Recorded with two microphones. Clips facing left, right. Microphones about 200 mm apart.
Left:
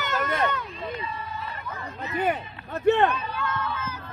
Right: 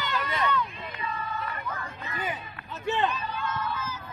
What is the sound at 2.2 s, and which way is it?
Speech, 60° left (ahead or behind).